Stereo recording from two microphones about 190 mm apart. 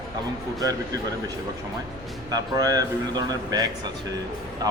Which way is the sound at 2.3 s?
20° right (ahead or behind).